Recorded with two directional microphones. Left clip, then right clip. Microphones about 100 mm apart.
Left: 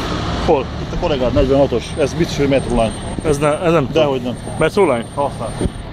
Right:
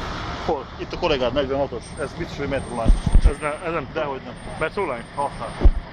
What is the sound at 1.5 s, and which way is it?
Speech, 60° left (ahead or behind).